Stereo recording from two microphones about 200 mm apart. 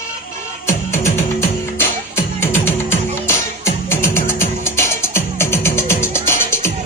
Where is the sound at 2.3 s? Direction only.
10° left (ahead or behind).